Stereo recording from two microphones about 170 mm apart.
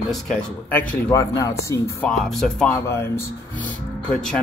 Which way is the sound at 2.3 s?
5° left (ahead or behind).